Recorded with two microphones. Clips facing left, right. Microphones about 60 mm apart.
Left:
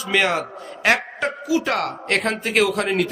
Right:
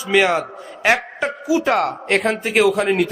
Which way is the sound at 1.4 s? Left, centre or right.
Centre.